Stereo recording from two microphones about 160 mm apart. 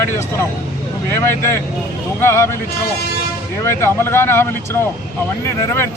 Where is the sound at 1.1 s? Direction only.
15° left (ahead or behind).